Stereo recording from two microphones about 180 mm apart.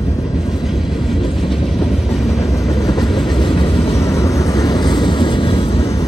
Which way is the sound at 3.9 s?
15° left (ahead or behind).